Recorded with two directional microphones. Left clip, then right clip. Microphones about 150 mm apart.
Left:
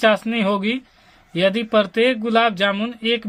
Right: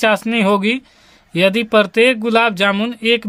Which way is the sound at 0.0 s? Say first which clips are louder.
Right 2 dB; 45° right (ahead or behind).